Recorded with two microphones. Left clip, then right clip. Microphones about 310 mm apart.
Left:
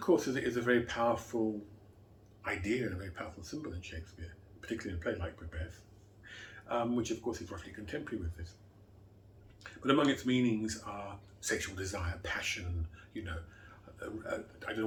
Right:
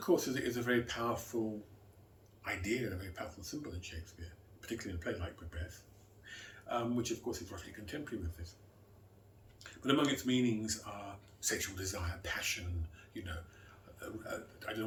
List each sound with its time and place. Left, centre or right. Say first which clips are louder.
0.0 s speech: left 3 dB; centre
2.4 s speech: left 3 dB; centre
9.6 s speech: left 3 dB; centre